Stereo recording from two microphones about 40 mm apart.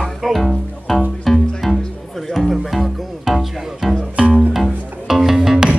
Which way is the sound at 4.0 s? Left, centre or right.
Right.